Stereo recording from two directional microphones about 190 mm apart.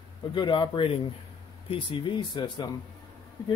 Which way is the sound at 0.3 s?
25° left (ahead or behind).